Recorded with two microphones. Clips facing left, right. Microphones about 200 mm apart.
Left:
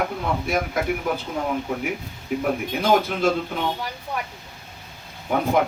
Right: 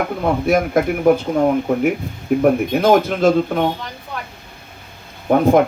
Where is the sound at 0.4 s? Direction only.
50° right (ahead or behind).